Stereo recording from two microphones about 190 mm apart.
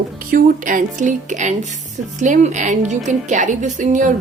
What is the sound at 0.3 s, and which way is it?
A woman's voice, 45° right (ahead or behind).